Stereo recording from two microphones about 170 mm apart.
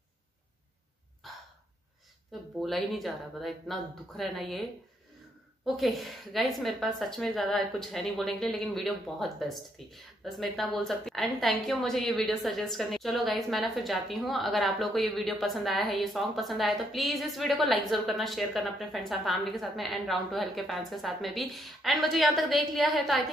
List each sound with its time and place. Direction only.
2.6 s a woman's voice: centre (ahead or behind)
5.8 s a woman's voice: centre (ahead or behind)